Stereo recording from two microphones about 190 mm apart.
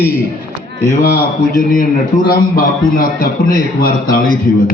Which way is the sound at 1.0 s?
50° left (ahead or behind).